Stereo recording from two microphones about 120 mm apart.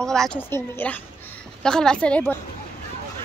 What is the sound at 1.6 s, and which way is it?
Speech, 5° left (ahead or behind).